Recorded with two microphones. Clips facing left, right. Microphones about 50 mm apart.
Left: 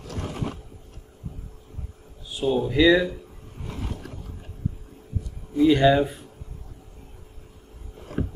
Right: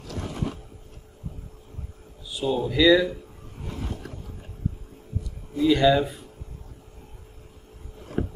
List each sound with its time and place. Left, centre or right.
2.4 s speech: left
5.6 s speech: left